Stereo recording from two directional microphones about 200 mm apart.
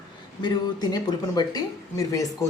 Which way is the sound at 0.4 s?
20° left (ahead or behind).